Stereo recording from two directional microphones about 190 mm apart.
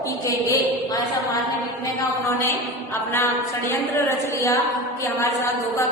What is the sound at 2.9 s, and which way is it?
Music, 10° left (ahead or behind).